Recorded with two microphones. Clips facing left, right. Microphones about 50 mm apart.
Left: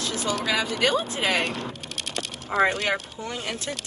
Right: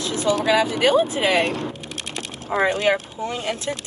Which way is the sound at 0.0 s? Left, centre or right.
Right.